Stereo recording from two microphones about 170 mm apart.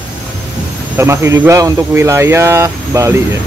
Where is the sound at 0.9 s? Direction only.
15° right (ahead or behind).